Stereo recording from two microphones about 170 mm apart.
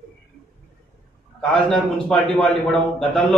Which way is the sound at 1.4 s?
5° left (ahead or behind).